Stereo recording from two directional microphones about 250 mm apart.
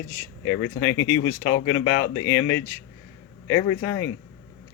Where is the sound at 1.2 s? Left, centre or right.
Left.